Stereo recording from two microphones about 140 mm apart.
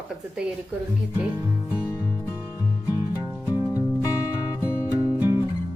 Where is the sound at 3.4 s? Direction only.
25° left (ahead or behind).